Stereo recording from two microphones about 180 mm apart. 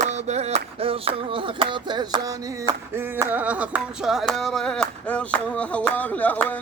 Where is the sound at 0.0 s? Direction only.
40° right (ahead or behind).